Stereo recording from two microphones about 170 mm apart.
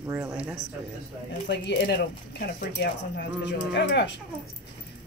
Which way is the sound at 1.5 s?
90° left.